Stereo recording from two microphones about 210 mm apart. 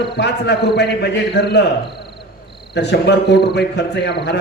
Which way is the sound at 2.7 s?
55° left (ahead or behind).